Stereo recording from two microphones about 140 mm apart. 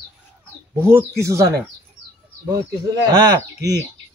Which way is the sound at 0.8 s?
20° right (ahead or behind).